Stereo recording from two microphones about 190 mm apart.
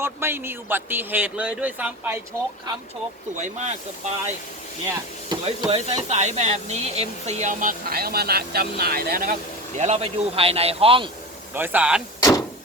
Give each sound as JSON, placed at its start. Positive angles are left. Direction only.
{"t": 0.0, "sound": "a man's voice", "side_deg": -10}
{"t": 3.3, "sound": "speech", "side_deg": -40}
{"t": 5.3, "sound": "speech", "side_deg": -30}
{"t": 9.7, "sound": "speech", "side_deg": -35}
{"t": 11.5, "sound": "a man's voice", "side_deg": -10}
{"t": 12.2, "sound": "vehicle", "side_deg": 20}